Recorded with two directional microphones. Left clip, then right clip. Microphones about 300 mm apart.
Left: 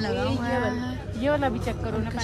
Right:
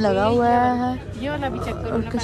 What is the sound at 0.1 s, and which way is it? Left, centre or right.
Speech, left.